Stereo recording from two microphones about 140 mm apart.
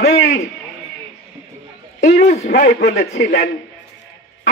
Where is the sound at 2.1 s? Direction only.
55° left (ahead or behind).